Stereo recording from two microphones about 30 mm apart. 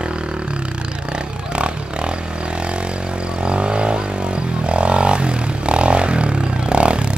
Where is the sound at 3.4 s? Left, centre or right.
Right.